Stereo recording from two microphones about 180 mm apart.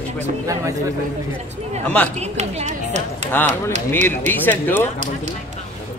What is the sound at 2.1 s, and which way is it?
Speech, 40° right (ahead or behind).